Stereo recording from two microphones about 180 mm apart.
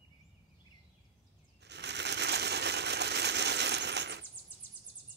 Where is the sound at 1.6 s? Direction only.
75° right (ahead or behind).